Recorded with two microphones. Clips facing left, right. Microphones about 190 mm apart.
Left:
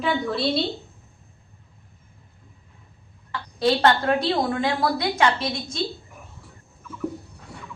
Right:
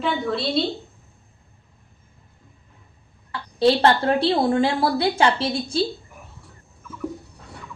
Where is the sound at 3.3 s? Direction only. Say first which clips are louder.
Right 4 dB; 30° right (ahead or behind).